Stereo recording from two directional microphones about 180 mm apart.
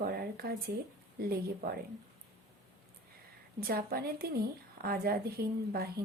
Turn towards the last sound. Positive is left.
turn(degrees=-60)  # may be behind; listen again after turning